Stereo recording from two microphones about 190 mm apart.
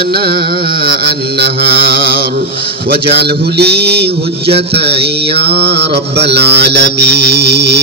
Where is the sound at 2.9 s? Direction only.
60° right (ahead or behind).